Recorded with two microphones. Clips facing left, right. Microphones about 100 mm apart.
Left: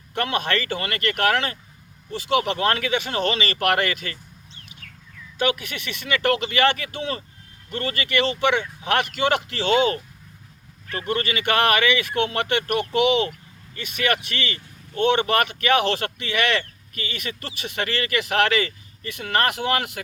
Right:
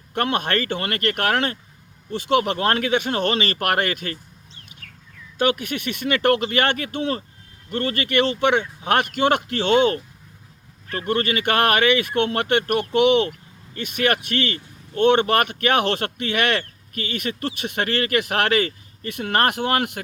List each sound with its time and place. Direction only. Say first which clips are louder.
0.1 s speech: right 2 dB; 50° right (ahead or behind)
5.4 s speech: right 3 dB; 50° right (ahead or behind)